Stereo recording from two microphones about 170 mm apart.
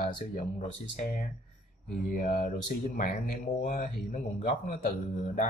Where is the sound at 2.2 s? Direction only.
60° left (ahead or behind).